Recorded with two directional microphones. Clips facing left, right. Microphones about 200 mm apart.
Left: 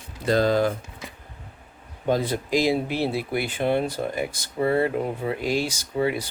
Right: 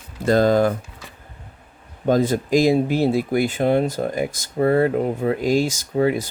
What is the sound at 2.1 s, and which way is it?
Speech, 45° right (ahead or behind).